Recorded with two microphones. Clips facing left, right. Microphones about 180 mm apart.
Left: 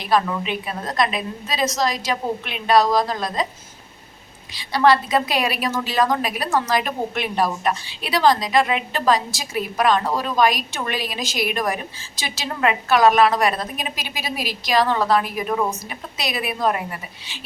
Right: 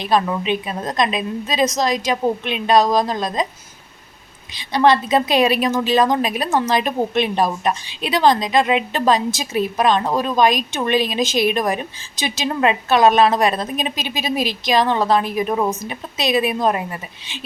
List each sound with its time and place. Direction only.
0.0 s a woman's voice: 20° right (ahead or behind)
4.5 s a woman's voice: 20° right (ahead or behind)